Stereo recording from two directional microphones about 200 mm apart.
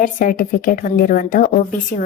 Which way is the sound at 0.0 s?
40° left (ahead or behind).